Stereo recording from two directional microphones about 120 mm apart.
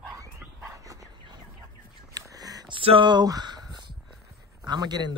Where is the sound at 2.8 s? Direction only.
45° right (ahead or behind).